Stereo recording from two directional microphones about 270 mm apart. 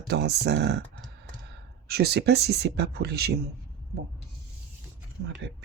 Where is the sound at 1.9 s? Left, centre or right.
Right.